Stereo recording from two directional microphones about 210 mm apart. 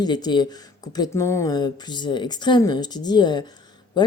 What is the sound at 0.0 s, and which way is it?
Speech, 20° left (ahead or behind).